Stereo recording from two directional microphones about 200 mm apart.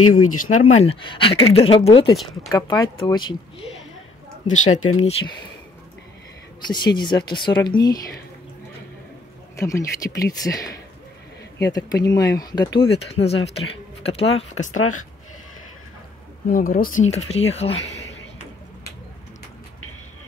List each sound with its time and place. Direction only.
0.2 s speech: 90° left
0.7 s speech: 25° left (ahead or behind)
4.5 s speech: 40° left (ahead or behind)
5.0 s speech: 20° left (ahead or behind)
6.7 s speech: 20° left (ahead or behind)
9.6 s speech: 15° left (ahead or behind)
12.8 s speech: 30° left (ahead or behind)
16.4 s speech: 45° left (ahead or behind)